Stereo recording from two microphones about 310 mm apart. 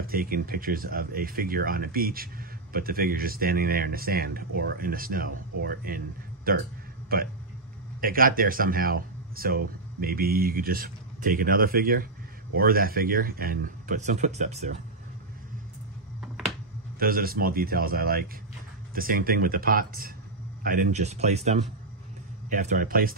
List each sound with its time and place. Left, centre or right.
0.0 s speech: right
16.2 s a sound: centre
17.0 s speech: right